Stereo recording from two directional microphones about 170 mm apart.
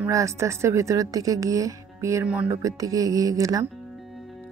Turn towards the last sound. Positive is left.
turn(degrees=-20)  # may be behind; listen again after turning